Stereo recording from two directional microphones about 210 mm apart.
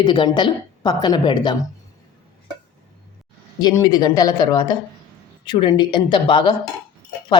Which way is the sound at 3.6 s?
20° left (ahead or behind).